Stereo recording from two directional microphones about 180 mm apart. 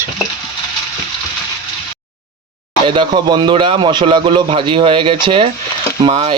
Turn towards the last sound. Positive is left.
turn(degrees=-35)  # may be behind; listen again after turning